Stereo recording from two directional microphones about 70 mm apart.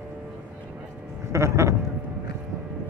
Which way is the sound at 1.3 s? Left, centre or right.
Right.